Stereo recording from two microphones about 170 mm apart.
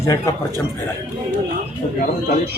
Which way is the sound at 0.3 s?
20° left (ahead or behind).